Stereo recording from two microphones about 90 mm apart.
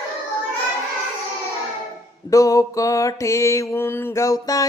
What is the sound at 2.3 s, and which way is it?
Mantra, 40° left (ahead or behind).